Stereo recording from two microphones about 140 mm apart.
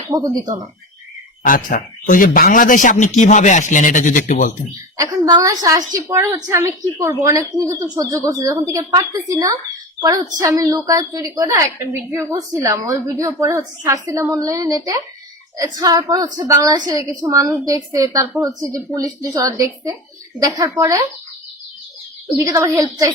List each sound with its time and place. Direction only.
0.1 s a woman's voice: 25° right (ahead or behind)
1.5 s speech: 80° left
2.9 s speech: 60° left (ahead or behind)
4.9 s a woman's voice: 25° right (ahead or behind)
22.4 s a woman's voice: 25° right (ahead or behind)